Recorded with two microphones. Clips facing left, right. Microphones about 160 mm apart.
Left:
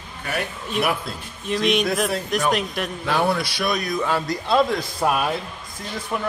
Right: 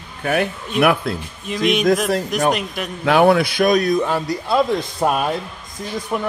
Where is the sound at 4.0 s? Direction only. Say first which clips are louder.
Right 3 dB; 15° right (ahead or behind).